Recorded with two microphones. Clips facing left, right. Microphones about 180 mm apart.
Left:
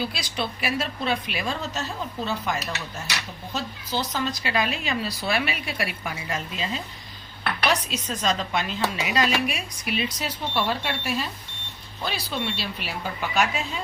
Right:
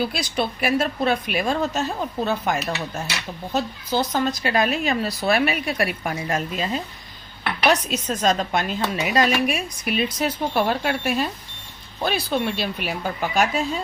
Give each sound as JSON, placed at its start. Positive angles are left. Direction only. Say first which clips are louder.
{"t": 0.0, "sound": "speech", "louder": "right 5 dB", "side_deg": -50}